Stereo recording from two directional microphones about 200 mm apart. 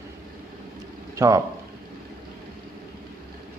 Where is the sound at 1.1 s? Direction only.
15° right (ahead or behind).